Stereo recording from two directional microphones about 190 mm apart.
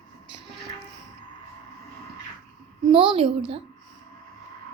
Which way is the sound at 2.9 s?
30° right (ahead or behind).